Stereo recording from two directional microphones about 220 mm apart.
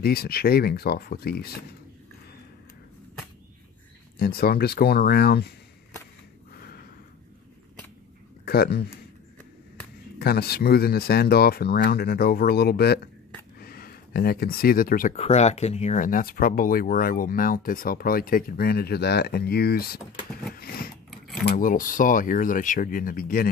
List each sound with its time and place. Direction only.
0.0 s speech: 45° left (ahead or behind)
4.2 s speech: 45° left (ahead or behind)
8.5 s speech: 45° left (ahead or behind)
10.1 s speech: 45° left (ahead or behind)
20.5 s a sound: 40° left (ahead or behind)
21.4 s speech: 40° left (ahead or behind)